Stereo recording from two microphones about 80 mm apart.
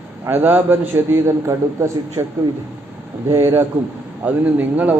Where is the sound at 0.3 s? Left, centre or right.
Right.